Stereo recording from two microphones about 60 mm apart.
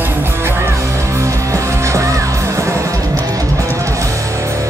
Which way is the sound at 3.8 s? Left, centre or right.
Right.